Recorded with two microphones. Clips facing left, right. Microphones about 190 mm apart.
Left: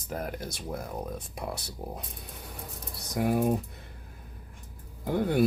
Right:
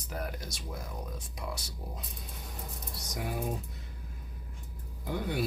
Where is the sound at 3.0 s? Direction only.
55° left (ahead or behind).